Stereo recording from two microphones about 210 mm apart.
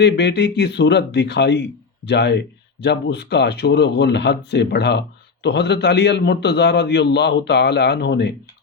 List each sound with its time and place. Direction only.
0.0 s speech: 55° left (ahead or behind)